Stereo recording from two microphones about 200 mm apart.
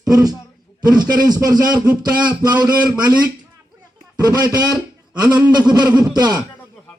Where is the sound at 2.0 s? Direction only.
20° right (ahead or behind).